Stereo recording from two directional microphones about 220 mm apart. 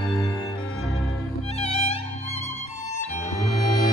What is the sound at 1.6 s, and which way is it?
Music, 30° left (ahead or behind).